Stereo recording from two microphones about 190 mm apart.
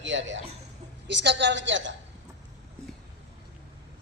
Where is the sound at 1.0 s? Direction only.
65° right (ahead or behind).